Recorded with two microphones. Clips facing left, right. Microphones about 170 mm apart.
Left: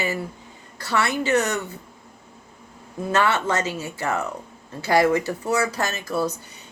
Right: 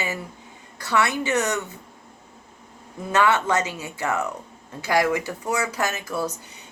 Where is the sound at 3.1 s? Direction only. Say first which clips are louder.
Right 1 dB; 15° right (ahead or behind).